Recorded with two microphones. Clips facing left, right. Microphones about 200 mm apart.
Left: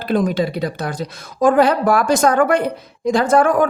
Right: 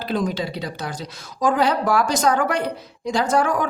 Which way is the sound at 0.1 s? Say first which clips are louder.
Left 6 dB; 55° left (ahead or behind).